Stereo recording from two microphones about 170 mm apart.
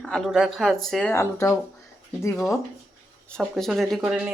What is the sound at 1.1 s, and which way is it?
Speech, 15° left (ahead or behind).